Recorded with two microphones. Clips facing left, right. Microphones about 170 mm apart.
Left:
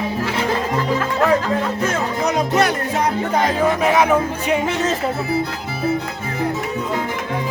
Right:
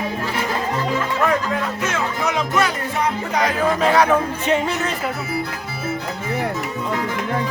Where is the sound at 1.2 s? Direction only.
35° left (ahead or behind).